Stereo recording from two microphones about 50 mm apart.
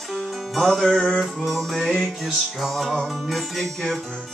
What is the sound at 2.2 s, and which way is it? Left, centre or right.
Music, centre.